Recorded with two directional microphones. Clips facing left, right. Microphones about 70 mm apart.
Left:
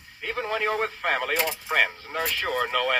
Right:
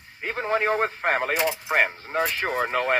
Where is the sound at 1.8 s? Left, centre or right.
Right.